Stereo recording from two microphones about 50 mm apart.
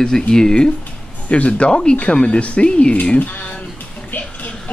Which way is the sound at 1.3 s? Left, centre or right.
Left.